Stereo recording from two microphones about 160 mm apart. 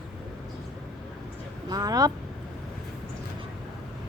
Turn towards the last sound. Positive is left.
turn(degrees=-25)  # may be behind; listen again after turning